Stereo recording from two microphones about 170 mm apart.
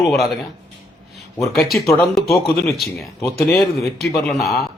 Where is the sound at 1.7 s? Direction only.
15° left (ahead or behind).